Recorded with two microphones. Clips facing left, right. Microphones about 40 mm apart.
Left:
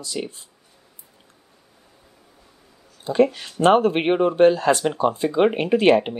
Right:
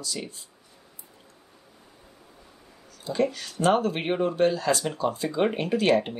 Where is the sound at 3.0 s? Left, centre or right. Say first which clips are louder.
Left 7 dB; left.